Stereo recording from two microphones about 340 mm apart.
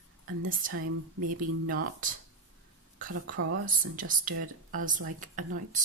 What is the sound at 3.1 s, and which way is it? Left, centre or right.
Speech, right.